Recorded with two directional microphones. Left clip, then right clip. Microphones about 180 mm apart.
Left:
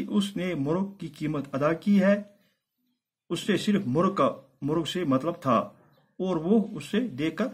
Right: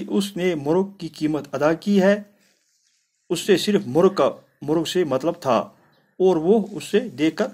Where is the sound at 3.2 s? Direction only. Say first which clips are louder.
Right 9 dB; 20° right (ahead or behind).